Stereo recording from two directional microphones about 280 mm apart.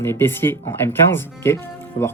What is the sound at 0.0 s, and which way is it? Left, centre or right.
Speech, centre.